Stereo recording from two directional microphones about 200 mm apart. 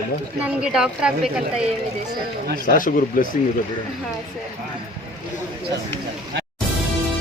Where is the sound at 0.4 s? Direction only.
5° right (ahead or behind).